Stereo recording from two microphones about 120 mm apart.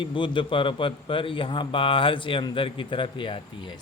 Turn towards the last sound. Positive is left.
turn(degrees=45)  # may be behind; listen again after turning